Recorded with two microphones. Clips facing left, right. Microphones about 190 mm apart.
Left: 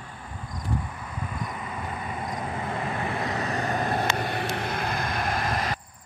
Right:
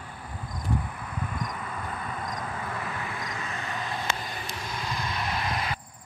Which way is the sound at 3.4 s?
40° left (ahead or behind).